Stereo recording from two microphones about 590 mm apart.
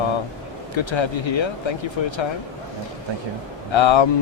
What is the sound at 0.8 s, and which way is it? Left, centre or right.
Speech, left.